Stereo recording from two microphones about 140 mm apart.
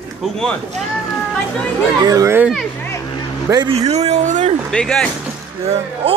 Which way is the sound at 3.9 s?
50° right (ahead or behind).